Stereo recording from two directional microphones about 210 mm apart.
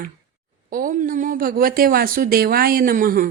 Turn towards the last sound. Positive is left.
turn(degrees=-40)  # may be behind; listen again after turning